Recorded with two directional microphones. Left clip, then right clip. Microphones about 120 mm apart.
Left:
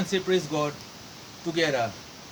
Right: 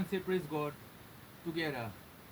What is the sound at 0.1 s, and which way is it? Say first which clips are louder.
Speech: left 10 dB; 35° left (ahead or behind).